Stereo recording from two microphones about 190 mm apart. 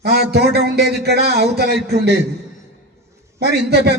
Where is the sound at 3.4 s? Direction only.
60° right (ahead or behind).